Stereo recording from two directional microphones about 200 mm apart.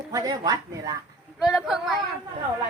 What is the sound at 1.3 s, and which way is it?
Speech, centre (ahead or behind).